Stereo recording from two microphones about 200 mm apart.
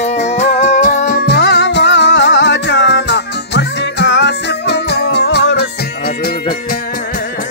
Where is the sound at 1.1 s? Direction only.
55° left (ahead or behind).